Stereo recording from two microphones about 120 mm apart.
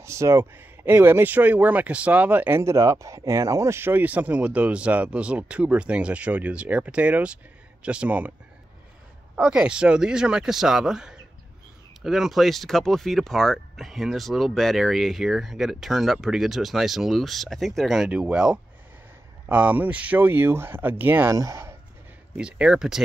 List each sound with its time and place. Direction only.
0.0 s speech: 25° right (ahead or behind)
9.3 s speech: 5° right (ahead or behind); by 21.7 s 25° right (ahead or behind)
22.4 s speech: 5° right (ahead or behind)